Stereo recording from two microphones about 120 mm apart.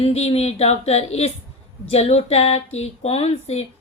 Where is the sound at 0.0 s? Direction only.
60° left (ahead or behind).